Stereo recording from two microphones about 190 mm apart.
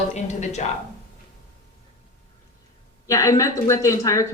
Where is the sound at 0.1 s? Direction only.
35° left (ahead or behind).